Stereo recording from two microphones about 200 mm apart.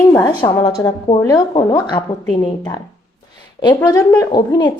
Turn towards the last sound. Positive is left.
turn(degrees=20)  # may be behind; listen again after turning